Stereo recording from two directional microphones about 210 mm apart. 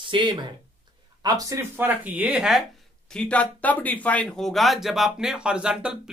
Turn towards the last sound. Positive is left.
turn(degrees=-5)  # may be behind; listen again after turning